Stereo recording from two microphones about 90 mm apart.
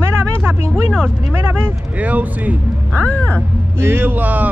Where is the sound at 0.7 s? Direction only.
10° left (ahead or behind).